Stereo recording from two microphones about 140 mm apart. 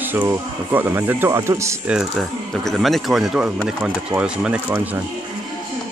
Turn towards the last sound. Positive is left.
turn(degrees=-10)  # may be behind; listen again after turning